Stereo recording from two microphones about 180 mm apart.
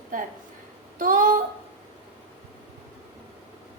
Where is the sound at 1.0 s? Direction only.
45° right (ahead or behind).